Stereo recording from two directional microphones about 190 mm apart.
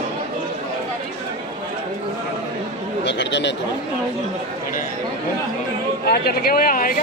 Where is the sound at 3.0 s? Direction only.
70° left (ahead or behind).